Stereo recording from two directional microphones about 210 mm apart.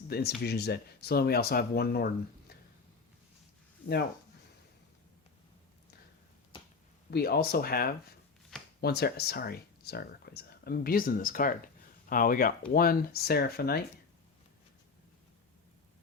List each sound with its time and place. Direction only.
0.1 s speech: 50° left (ahead or behind)
7.1 s speech: 45° left (ahead or behind)